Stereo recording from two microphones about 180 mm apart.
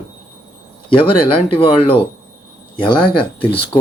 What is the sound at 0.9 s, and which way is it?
Speech, 30° left (ahead or behind).